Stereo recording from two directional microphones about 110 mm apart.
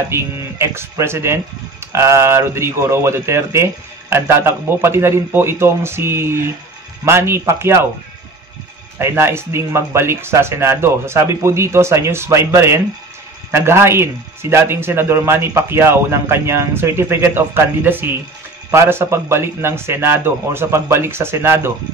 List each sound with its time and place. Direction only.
0.1 s a man's voice: 25° right (ahead or behind)
8.9 s a man's voice: 25° right (ahead or behind)